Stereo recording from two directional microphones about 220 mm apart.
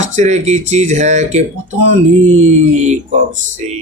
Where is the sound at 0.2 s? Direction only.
30° right (ahead or behind).